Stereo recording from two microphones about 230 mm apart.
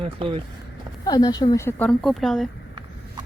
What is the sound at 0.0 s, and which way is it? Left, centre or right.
Speech, right.